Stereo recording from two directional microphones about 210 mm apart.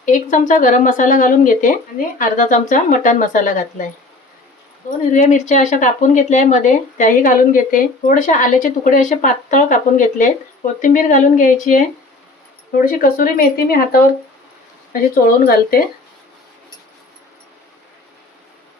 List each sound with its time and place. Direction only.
0.0 s a woman's voice: 40° left (ahead or behind)
4.9 s a woman's voice: 35° left (ahead or behind)
10.8 s a woman's voice: 40° left (ahead or behind)
15.1 s speech: 45° left (ahead or behind)